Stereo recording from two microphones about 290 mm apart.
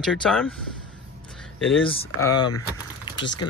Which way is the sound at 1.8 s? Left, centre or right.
Centre.